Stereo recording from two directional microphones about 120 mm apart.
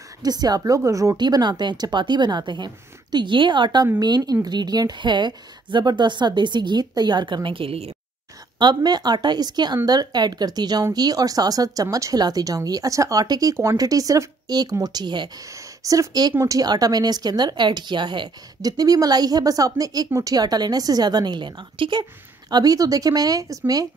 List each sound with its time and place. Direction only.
0.2 s speech: 35° right (ahead or behind); by 7.9 s 55° right (ahead or behind)
8.5 s speech: 35° right (ahead or behind)